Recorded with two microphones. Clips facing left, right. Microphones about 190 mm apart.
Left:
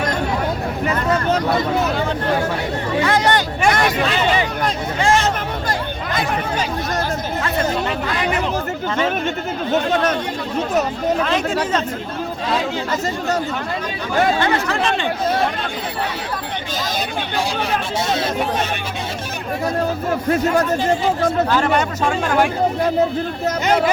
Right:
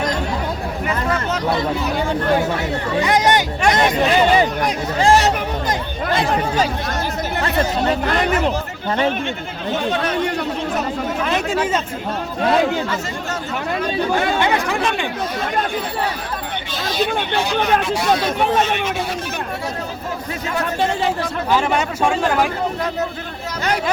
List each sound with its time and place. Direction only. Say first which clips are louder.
3.0 s speech: right 1 dB; 15° right (ahead or behind)
3.7 s hubbub: right 2 dB; 20° right (ahead or behind)
4.9 s hubbub: right 3 dB; 35° right (ahead or behind)
7.4 s chatter: right 3 dB; 35° right (ahead or behind)
8.1 s a sound: right 3 dB; 50° right (ahead or behind)
14.4 s speech: even; 15° right (ahead or behind)
17.3 s speech: right 3 dB; 30° left (ahead or behind)